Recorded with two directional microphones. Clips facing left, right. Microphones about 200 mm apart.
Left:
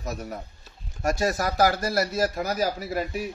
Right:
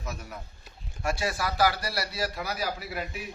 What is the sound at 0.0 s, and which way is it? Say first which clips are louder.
A man's voice: left 6 dB; 40° left (ahead or behind).